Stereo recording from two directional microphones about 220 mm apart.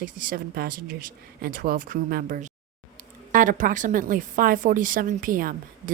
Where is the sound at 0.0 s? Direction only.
40° right (ahead or behind).